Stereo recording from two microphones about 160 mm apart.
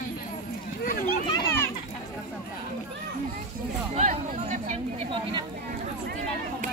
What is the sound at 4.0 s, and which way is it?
Chatter, 50° right (ahead or behind).